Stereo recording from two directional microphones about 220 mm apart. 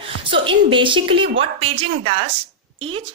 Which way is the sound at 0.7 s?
20° right (ahead or behind).